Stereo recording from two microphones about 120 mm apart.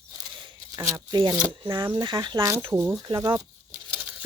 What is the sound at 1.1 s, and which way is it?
Speech, 40° right (ahead or behind).